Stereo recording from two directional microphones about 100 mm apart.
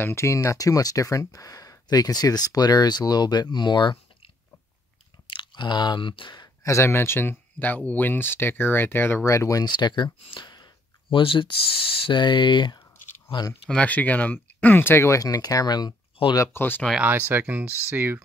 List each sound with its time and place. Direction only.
0.0 s speech: 25° left (ahead or behind); by 4.3 s 50° left (ahead or behind)
5.2 s chewing: 55° left (ahead or behind)
6.6 s speech: 30° left (ahead or behind)
9.7 s speech: 50° left (ahead or behind)
13.7 s speech: 15° left (ahead or behind); by 15.9 s 40° left (ahead or behind)
16.5 s speech: 20° left (ahead or behind)
17.3 s speech: 20° right (ahead or behind)